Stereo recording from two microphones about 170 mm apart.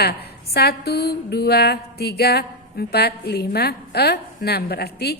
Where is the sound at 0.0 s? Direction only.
70° left (ahead or behind).